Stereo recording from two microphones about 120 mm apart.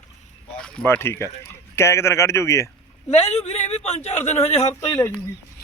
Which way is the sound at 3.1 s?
60° left (ahead or behind).